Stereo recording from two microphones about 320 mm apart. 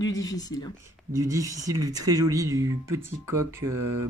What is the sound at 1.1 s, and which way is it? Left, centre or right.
Speech, centre.